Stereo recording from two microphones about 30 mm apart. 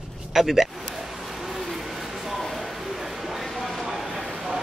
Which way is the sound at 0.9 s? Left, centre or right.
Centre.